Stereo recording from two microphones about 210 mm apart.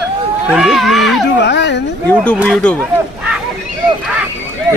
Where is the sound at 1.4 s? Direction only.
55° left (ahead or behind).